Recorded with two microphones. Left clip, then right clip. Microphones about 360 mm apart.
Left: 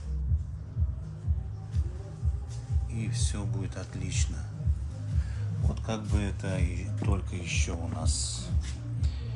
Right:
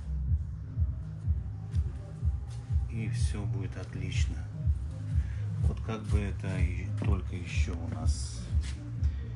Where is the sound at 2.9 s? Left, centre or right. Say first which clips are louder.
Left 3 dB; centre.